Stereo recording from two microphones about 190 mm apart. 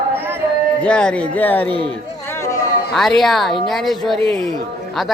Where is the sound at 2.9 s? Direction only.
Centre (ahead or behind).